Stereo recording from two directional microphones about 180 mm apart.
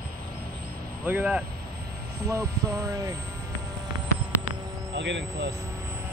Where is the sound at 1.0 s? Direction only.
10° right (ahead or behind).